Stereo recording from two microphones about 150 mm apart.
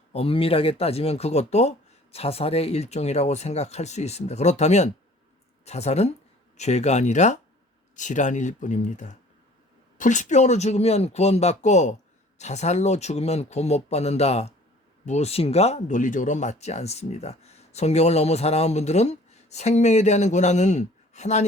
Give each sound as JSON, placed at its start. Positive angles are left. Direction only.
{"t": 0.1, "sound": "speech", "side_deg": 40}